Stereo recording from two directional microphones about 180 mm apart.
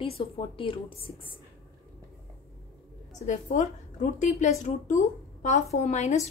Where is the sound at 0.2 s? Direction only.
30° left (ahead or behind).